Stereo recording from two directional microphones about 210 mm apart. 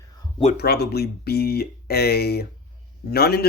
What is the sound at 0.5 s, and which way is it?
Speech, 50° left (ahead or behind).